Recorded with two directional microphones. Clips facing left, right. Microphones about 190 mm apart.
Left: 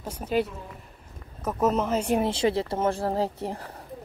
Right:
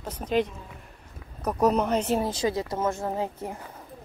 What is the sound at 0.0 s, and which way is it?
A woman's voice, 10° left (ahead or behind).